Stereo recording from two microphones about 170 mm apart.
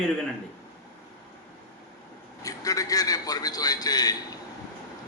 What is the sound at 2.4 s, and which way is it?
A man's voice, 20° left (ahead or behind).